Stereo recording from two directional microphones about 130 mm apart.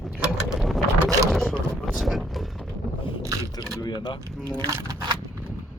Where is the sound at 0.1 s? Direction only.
5° right (ahead or behind).